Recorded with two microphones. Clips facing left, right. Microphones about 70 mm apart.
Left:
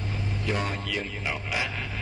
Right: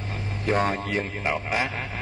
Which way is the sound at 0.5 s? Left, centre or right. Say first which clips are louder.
Right 7 dB; right.